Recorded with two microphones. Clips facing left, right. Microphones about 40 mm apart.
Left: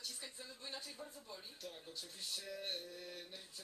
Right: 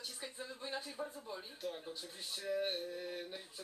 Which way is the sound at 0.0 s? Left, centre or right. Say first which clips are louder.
Right 4 dB; right.